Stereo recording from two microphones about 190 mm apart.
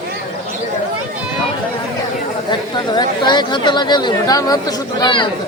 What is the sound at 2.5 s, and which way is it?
Speech, 20° left (ahead or behind).